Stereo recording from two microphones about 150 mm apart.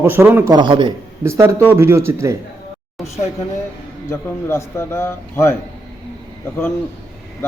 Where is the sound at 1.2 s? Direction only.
20° right (ahead or behind).